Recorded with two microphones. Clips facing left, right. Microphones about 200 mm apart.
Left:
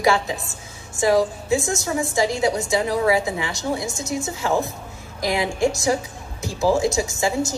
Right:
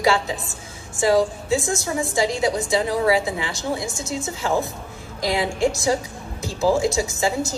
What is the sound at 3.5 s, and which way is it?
A woman's voice, 15° left (ahead or behind).